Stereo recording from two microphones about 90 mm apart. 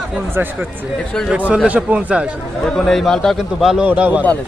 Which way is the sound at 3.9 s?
15° right (ahead or behind).